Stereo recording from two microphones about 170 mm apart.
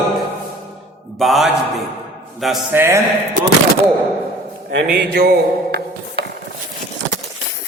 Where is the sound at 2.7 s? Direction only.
15° right (ahead or behind).